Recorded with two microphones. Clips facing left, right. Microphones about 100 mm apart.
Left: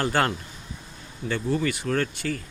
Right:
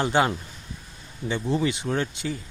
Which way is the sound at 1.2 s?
20° right (ahead or behind).